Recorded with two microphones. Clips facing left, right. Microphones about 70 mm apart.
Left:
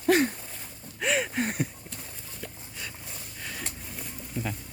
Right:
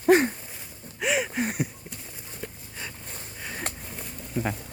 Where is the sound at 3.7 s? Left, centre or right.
Right.